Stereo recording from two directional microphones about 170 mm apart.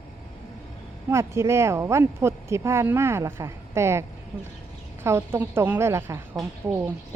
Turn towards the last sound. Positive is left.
turn(degrees=-15)  # may be behind; listen again after turning